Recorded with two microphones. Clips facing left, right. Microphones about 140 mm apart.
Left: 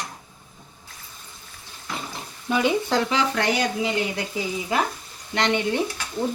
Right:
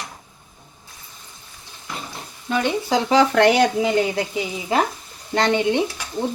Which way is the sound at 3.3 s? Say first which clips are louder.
Right 9 dB; 65° right (ahead or behind).